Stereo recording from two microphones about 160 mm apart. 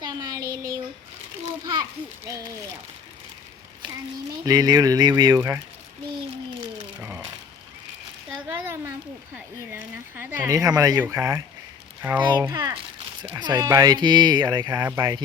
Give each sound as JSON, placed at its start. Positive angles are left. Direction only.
{"t": 0.0, "sound": "child singing", "side_deg": -25}
{"t": 2.2, "sound": "speech", "side_deg": -20}
{"t": 4.4, "sound": "speech", "side_deg": -25}
{"t": 8.4, "sound": "a sound", "side_deg": -15}
{"t": 10.2, "sound": "speech", "side_deg": -15}